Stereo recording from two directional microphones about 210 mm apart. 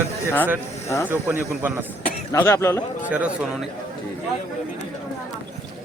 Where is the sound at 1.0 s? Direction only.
10° right (ahead or behind).